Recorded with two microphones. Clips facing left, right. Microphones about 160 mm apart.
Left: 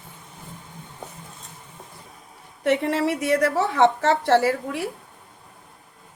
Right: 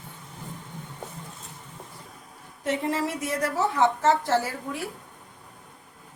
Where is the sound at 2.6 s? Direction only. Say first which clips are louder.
Left 5 dB; 65° left (ahead or behind).